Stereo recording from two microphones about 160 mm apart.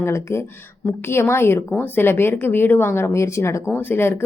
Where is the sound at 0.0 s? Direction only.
15° left (ahead or behind).